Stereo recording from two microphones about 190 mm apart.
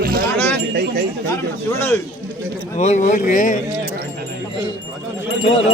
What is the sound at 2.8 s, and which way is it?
Wind chime, 40° left (ahead or behind).